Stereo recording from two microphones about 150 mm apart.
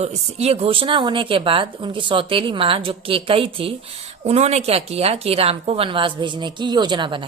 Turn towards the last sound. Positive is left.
turn(degrees=-35)  # may be behind; listen again after turning